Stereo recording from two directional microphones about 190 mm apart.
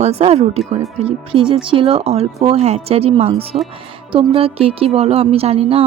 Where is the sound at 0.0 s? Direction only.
35° right (ahead or behind).